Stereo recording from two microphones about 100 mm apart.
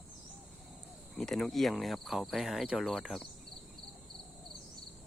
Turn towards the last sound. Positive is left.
turn(degrees=0)  # may be behind; listen again after turning